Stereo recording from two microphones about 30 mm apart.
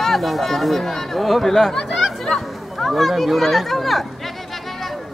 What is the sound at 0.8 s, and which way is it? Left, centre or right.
Speech, centre.